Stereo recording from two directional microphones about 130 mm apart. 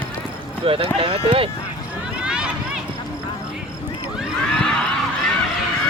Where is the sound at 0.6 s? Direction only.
45° right (ahead or behind).